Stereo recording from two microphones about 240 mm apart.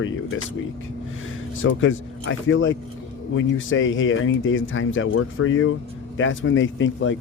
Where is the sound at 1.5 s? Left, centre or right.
Left.